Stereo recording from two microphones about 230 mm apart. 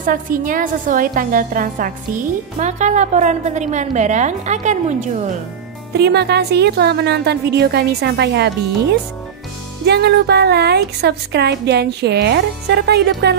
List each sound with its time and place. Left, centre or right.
0.0 s a woman's voice: right
5.9 s speech: right
9.8 s speech: right